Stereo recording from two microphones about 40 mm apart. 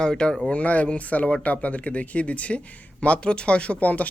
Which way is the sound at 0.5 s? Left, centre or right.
Left.